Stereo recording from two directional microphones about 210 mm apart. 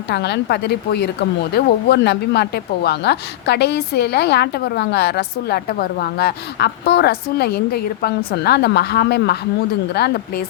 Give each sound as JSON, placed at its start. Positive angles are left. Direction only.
{"t": 0.1, "sound": "a woman's voice", "side_deg": 55}